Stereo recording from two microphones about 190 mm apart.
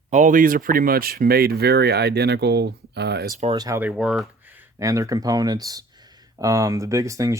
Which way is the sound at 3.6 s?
15° right (ahead or behind).